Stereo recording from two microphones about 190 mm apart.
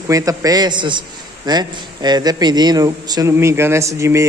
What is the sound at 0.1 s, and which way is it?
A man's voice, 20° right (ahead or behind).